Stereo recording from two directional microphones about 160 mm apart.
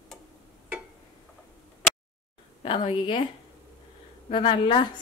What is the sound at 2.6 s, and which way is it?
Speech, 30° left (ahead or behind).